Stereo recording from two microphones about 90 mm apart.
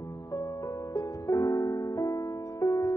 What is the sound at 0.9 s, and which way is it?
Music, 40° left (ahead or behind).